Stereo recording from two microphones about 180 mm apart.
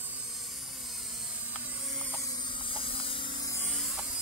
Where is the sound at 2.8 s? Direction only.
30° left (ahead or behind).